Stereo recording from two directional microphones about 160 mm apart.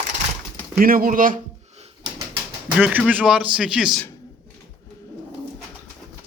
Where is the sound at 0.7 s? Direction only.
65° right (ahead or behind).